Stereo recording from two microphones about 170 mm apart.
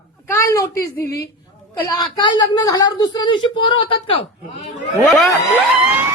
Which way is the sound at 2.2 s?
25° left (ahead or behind).